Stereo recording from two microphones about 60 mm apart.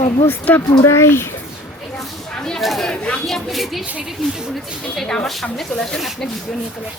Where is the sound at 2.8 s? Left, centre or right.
Centre.